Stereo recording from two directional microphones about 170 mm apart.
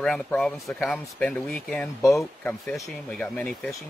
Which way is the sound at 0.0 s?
5° left (ahead or behind).